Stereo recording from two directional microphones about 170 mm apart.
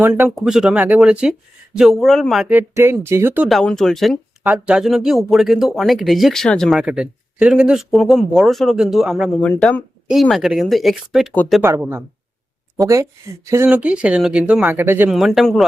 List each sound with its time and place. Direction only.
0.0 s speech: 10° right (ahead or behind)
0.3 s speech: centre (ahead or behind)
2.6 s speech: 15° right (ahead or behind)
3.5 s speech: 5° left (ahead or behind)
11.6 s speech: 15° right (ahead or behind)
15.1 s speech: centre (ahead or behind)